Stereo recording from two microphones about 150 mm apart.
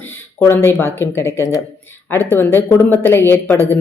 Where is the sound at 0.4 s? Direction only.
15° left (ahead or behind).